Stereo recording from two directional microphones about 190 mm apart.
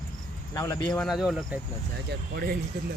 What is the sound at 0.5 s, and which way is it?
Speech, 15° left (ahead or behind).